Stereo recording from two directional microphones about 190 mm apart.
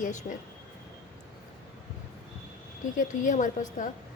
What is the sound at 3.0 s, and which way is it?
Speech, 45° left (ahead or behind).